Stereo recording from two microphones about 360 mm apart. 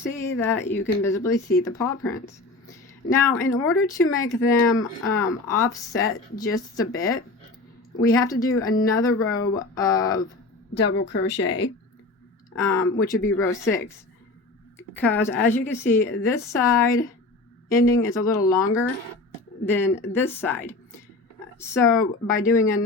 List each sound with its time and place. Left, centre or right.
0.0 s speech: centre
11.1 s speech: left
12.5 s speech: centre
13.1 s speech: left
13.5 s speech: centre
14.9 s speech: centre
19.6 s speech: centre